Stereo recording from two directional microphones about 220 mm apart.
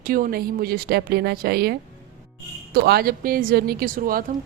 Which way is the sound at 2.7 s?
45° right (ahead or behind).